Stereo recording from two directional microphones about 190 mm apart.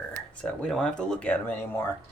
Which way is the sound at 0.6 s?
5° left (ahead or behind).